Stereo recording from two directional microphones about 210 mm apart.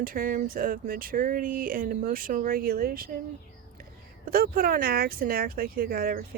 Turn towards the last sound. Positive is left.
turn(degrees=-45)  # may be behind; listen again after turning